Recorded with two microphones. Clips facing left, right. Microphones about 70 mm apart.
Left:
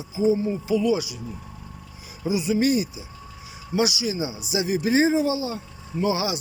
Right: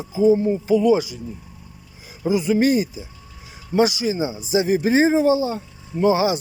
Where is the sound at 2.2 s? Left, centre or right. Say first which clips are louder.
Right 4 dB; right.